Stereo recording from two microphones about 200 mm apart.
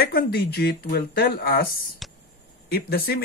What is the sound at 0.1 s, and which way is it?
Speech, 50° left (ahead or behind).